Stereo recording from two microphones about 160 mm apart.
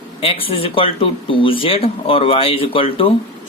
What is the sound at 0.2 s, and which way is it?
Speech, 35° left (ahead or behind).